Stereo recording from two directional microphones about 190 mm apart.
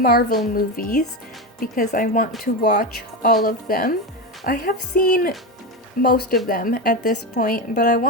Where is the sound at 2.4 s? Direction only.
60° left (ahead or behind).